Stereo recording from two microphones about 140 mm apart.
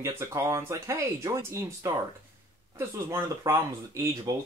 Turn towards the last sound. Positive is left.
turn(degrees=-25)  # may be behind; listen again after turning